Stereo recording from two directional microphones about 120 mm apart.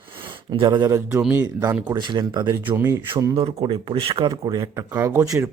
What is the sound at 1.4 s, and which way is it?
Speech, 30° right (ahead or behind).